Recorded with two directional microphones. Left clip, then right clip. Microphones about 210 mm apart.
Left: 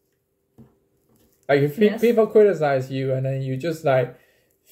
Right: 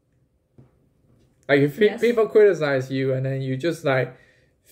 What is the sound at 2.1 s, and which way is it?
Speech, 25° right (ahead or behind).